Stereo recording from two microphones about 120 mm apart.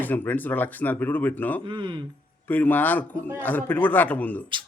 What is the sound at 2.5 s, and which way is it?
Speech, 15° left (ahead or behind).